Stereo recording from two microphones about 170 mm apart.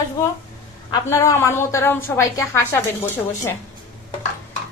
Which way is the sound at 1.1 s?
15° left (ahead or behind).